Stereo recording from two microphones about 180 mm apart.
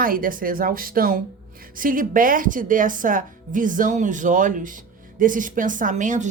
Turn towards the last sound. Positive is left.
turn(degrees=-45)  # may be behind; listen again after turning